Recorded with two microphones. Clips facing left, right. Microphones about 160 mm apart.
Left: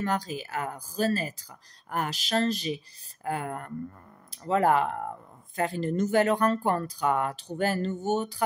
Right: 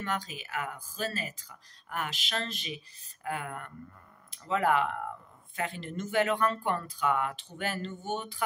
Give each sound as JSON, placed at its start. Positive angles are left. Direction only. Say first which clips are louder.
{"t": 0.0, "sound": "speech", "louder": "left 6 dB", "side_deg": 40}